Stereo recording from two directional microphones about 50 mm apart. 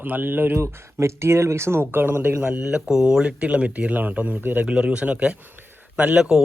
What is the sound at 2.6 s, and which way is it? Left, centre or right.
Speech, centre.